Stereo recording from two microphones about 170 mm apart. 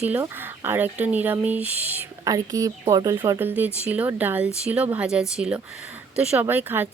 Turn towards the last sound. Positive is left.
turn(degrees=-10)  # may be behind; listen again after turning